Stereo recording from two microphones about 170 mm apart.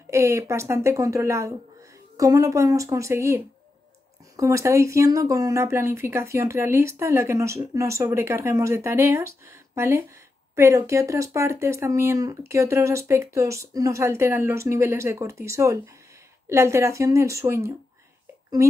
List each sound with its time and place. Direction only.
0.1 s speech: 15° right (ahead or behind)